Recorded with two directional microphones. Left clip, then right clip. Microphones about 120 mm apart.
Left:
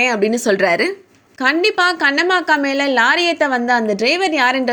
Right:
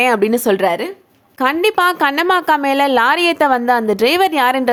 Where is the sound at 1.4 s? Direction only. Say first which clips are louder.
Even; 25° right (ahead or behind).